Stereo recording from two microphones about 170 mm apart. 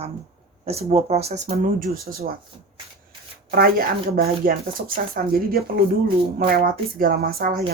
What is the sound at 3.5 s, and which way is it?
Speech, 60° right (ahead or behind).